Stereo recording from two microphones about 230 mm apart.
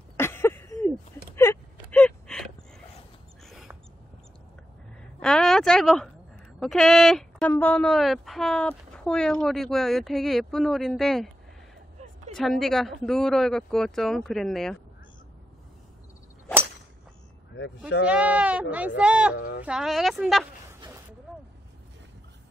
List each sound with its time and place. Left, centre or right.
0.2 s a sound: centre
5.2 s speech: centre
12.4 s speech: centre
18.0 s speech: centre
19.3 s speech: left
19.6 s speech: centre